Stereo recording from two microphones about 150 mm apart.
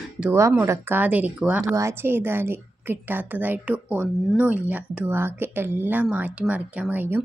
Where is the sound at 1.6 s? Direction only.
20° right (ahead or behind).